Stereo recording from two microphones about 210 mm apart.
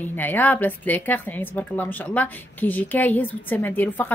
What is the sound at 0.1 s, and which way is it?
A woman's voice, 10° left (ahead or behind).